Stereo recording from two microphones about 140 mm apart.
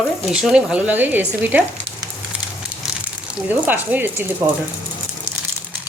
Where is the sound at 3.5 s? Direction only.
10° right (ahead or behind).